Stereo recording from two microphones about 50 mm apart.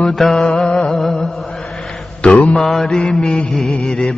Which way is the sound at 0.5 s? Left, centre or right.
Centre.